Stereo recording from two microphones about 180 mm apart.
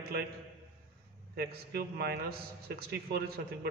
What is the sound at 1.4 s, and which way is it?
A man's voice, 60° right (ahead or behind).